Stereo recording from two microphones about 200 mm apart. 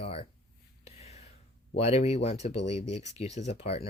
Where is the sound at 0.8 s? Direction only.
35° left (ahead or behind).